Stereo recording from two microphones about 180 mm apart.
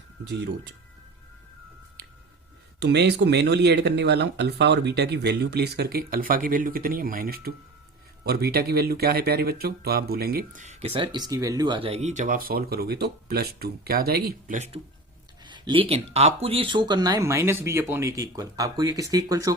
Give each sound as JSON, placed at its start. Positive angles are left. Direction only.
{"t": 0.3, "sound": "speech", "side_deg": -80}
{"t": 2.8, "sound": "speech", "side_deg": -65}
{"t": 15.4, "sound": "speech", "side_deg": -25}